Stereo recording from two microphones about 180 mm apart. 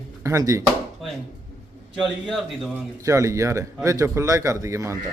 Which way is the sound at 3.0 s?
15° right (ahead or behind).